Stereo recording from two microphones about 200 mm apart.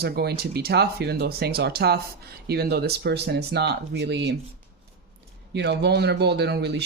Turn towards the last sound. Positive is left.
turn(degrees=-55)  # may be behind; listen again after turning